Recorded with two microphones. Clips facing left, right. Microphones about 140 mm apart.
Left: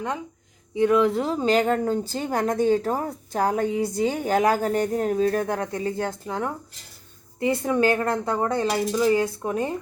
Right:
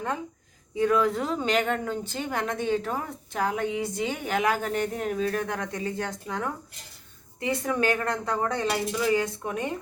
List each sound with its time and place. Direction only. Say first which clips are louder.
0.8 s a woman's voice: left 4 dB; 25° left (ahead or behind)